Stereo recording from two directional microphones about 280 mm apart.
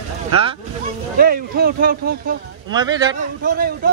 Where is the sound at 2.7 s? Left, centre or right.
Centre.